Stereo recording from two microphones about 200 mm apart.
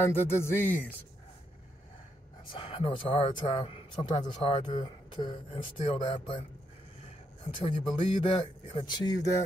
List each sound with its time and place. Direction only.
0.0 s speech: 10° left (ahead or behind)
2.5 s speech: 25° left (ahead or behind)
7.5 s speech: 25° left (ahead or behind)